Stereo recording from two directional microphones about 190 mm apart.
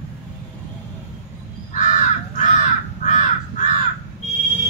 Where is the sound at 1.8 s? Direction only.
40° left (ahead or behind).